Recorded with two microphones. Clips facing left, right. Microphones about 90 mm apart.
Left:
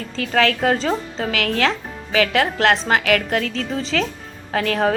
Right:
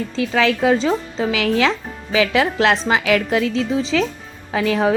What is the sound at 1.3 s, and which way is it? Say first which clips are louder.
A woman's voice: right 2 dB; 15° right (ahead or behind).